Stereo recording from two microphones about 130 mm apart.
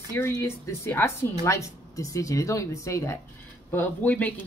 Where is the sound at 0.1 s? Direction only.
20° left (ahead or behind).